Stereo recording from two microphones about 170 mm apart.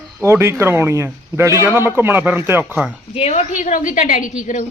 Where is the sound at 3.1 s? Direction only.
40° left (ahead or behind).